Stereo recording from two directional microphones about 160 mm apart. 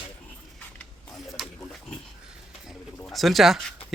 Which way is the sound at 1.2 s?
Centre (ahead or behind).